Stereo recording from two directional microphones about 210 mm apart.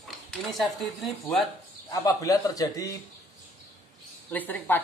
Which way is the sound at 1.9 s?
15° left (ahead or behind).